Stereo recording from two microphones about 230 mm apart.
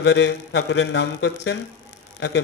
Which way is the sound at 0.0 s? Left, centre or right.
Left.